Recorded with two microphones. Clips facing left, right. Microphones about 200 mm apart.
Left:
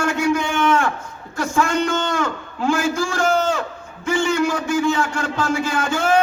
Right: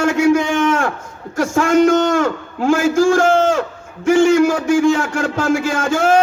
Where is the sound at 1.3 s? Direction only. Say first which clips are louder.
Right 6 dB; 45° right (ahead or behind).